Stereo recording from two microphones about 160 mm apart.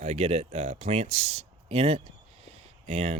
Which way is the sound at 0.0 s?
45° right (ahead or behind).